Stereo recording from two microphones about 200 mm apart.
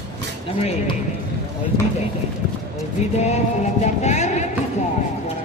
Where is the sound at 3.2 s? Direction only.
35° left (ahead or behind).